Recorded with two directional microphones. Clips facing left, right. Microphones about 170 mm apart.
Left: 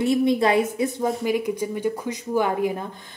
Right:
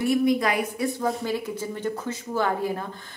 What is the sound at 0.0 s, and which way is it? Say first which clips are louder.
A woman's voice: left 2 dB; 25° left (ahead or behind).